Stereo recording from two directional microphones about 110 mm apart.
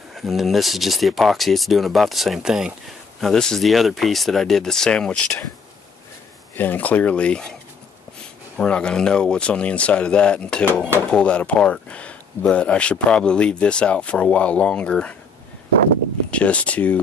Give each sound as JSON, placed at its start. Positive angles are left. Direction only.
{"t": 0.1, "sound": "speech", "side_deg": 0}
{"t": 6.5, "sound": "speech", "side_deg": 15}
{"t": 8.5, "sound": "speech", "side_deg": 10}
{"t": 16.3, "sound": "speech", "side_deg": 10}